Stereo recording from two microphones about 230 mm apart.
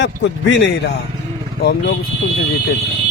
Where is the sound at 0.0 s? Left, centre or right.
Left.